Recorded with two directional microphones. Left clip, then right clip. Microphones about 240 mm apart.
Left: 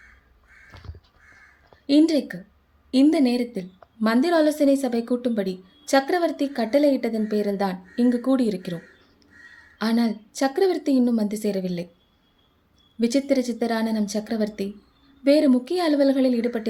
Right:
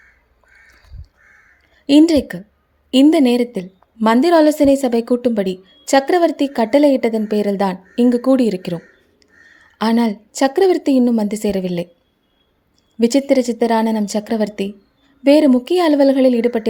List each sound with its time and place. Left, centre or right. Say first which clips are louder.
1.9 s a woman's voice: right 7 dB; right
13.0 s a woman's voice: right 8 dB; right